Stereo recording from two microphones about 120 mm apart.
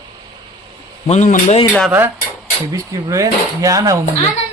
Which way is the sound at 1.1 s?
80° left.